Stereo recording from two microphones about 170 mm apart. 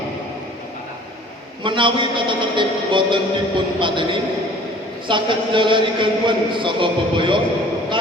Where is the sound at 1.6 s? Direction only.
30° right (ahead or behind).